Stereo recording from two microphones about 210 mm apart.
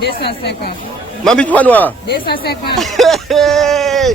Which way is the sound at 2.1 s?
50° left (ahead or behind).